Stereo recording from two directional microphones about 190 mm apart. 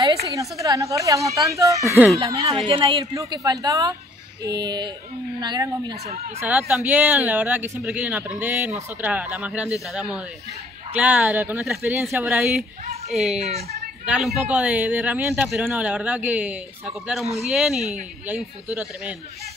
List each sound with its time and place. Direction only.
0.3 s a man's voice: 15° right (ahead or behind)
6.4 s a man's voice: 10° right (ahead or behind)
11.9 s a man's voice: 15° right (ahead or behind)
13.4 s a woman's voice: 35° right (ahead or behind)
14.0 s a man's voice: 5° right (ahead or behind)